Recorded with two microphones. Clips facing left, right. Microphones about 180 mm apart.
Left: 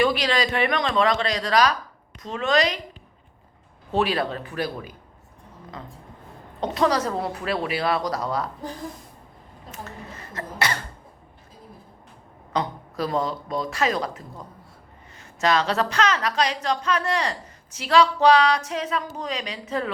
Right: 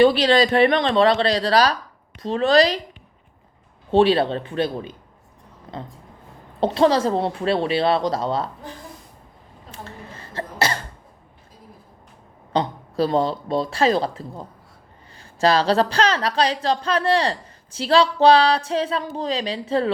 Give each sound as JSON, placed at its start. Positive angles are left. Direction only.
{"t": 0.0, "sound": "a woman's voice", "side_deg": -30}
{"t": 3.9, "sound": "speech", "side_deg": -30}
{"t": 9.7, "sound": "speech", "side_deg": -30}
{"t": 12.5, "sound": "a woman's voice", "side_deg": -30}